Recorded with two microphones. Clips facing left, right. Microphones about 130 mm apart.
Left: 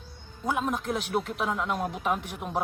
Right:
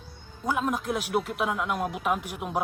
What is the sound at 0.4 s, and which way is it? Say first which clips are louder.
Speech: right 1 dB; centre (ahead or behind).